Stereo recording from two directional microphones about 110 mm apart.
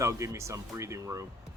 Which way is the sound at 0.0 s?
30° right (ahead or behind).